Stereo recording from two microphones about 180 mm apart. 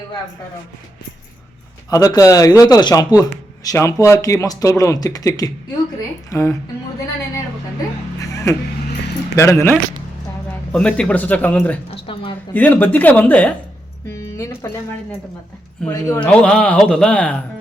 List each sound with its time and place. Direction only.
1.9 s a man's voice: 20° left (ahead or behind)
9.3 s speech: 15° left (ahead or behind)
14.1 s a sound: 15° left (ahead or behind)
15.9 s speech: 15° left (ahead or behind)
16.2 s speech: 5° left (ahead or behind)